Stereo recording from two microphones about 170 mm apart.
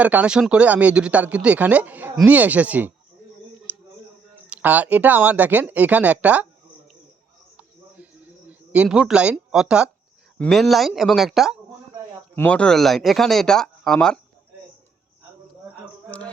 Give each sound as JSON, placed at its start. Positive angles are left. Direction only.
{"t": 0.0, "sound": "speech", "side_deg": -10}
{"t": 3.7, "sound": "a sound", "side_deg": -10}
{"t": 4.4, "sound": "speech", "side_deg": -10}
{"t": 8.7, "sound": "speech", "side_deg": -5}